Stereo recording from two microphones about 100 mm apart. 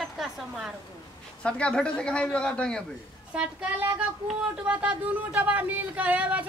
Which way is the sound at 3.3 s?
10° right (ahead or behind).